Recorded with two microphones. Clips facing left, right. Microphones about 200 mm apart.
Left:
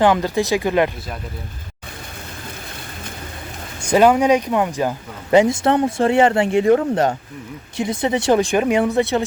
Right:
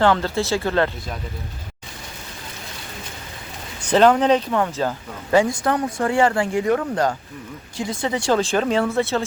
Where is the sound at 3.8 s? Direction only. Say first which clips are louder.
Left 1 dB; 10° left (ahead or behind).